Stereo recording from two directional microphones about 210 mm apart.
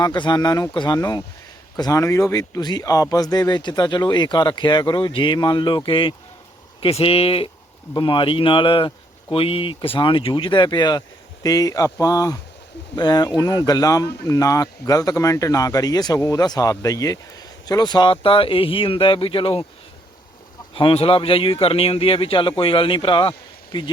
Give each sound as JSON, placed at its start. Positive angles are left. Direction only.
{"t": 0.0, "sound": "speech", "side_deg": 20}
{"t": 20.7, "sound": "speech", "side_deg": 25}